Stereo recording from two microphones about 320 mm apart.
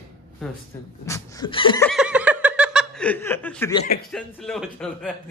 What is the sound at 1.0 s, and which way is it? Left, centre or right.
Laughter, centre.